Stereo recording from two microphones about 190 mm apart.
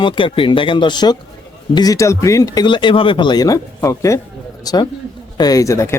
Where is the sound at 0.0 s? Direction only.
25° left (ahead or behind).